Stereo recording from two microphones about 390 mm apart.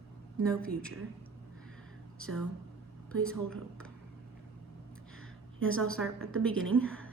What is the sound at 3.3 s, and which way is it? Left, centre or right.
Speech, centre.